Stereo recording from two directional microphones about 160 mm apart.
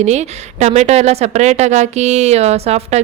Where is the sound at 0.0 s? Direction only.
45° right (ahead or behind).